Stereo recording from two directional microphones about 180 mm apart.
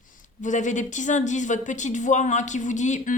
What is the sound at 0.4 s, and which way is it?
A woman's voice, 45° left (ahead or behind).